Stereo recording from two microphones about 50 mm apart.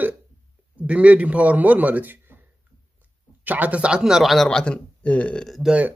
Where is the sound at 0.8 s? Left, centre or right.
Right.